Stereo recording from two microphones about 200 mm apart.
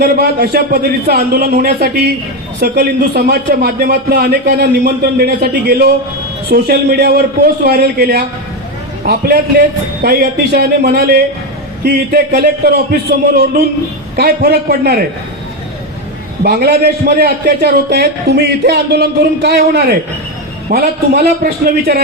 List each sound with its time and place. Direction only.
0.0 s a man's voice: 50° right (ahead or behind)
16.4 s a man's voice: 50° right (ahead or behind)